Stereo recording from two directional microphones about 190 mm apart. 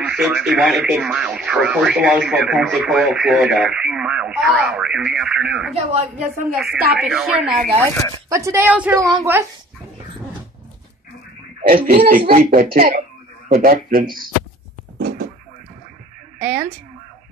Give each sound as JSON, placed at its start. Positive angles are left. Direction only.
{"t": 0.0, "sound": "speech", "side_deg": -5}
{"t": 7.8, "sound": "speech", "side_deg": 15}
{"t": 8.3, "sound": "a woman's voice", "side_deg": -15}
{"t": 11.6, "sound": "speech", "side_deg": -50}
{"t": 15.0, "sound": "a sound", "side_deg": -55}
{"t": 16.3, "sound": "speech", "side_deg": -10}